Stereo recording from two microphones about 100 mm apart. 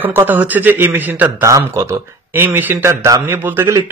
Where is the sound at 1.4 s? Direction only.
30° right (ahead or behind).